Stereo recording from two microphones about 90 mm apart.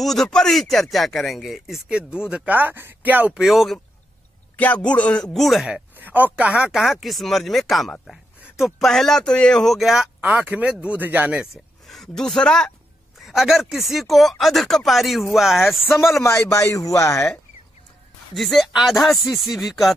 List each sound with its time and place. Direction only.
0.0 s speech: 5° left (ahead or behind); by 3.3 s 20° right (ahead or behind)
3.3 s speech: centre (ahead or behind)
4.6 s speech: 15° left (ahead or behind); by 5.8 s centre (ahead or behind)
5.9 s speech: 20° right (ahead or behind); by 10.1 s 5° right (ahead or behind)
10.2 s speech: 15° right (ahead or behind)
11.3 s speech: centre (ahead or behind)
13.2 s speech: 5° right (ahead or behind)
16.2 s speech: 35° left (ahead or behind)
18.3 s speech: centre (ahead or behind)